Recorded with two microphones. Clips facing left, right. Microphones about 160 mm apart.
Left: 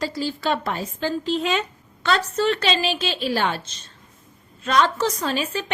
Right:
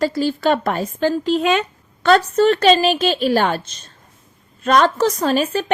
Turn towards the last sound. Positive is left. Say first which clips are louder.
# right 7 dB
turn(degrees=-45)  # may be behind; listen again after turning